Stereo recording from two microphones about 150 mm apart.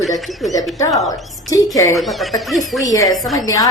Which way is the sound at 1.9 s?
Centre (ahead or behind).